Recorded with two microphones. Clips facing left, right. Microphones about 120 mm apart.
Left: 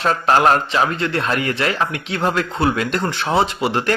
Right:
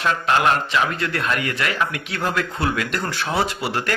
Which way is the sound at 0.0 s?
35° left (ahead or behind).